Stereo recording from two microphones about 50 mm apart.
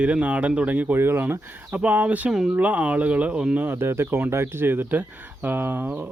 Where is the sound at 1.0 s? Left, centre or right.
Right.